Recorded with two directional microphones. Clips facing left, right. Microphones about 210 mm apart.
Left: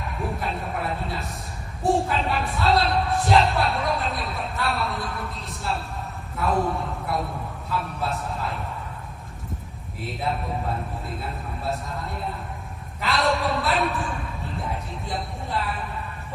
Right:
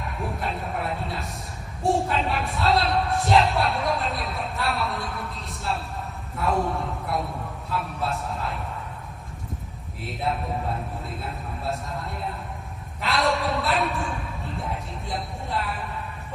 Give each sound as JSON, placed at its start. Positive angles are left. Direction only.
{"t": 0.2, "sound": "a man's voice", "side_deg": 0}
{"t": 10.0, "sound": "speech", "side_deg": 0}
{"t": 13.0, "sound": "a sound", "side_deg": 0}